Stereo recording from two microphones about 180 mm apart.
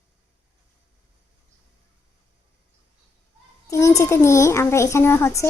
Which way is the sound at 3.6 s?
20° left (ahead or behind).